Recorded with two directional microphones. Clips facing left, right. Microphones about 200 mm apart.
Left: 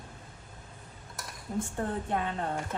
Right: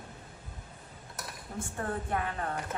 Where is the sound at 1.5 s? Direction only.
20° left (ahead or behind).